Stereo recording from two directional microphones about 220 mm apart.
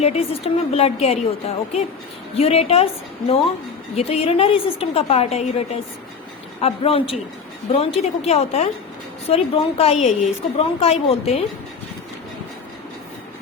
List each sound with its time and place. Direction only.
0.0 s a woman's voice: 30° left (ahead or behind)
6.6 s a woman's voice: 25° left (ahead or behind)